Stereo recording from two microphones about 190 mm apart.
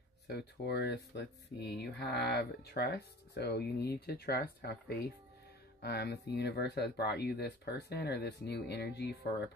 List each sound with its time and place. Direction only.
0.3 s speech: 60° left (ahead or behind)